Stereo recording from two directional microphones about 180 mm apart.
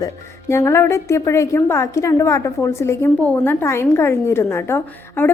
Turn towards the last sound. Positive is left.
turn(degrees=15)  # may be behind; listen again after turning